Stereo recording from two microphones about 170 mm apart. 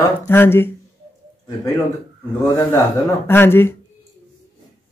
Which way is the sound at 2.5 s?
20° left (ahead or behind).